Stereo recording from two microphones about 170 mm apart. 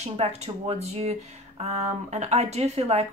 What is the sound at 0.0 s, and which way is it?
Speech, 40° right (ahead or behind).